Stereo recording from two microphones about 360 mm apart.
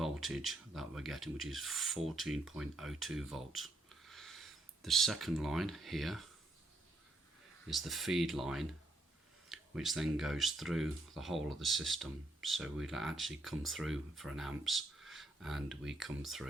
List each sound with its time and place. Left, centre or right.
0.0 s speech: centre
7.7 s speech: centre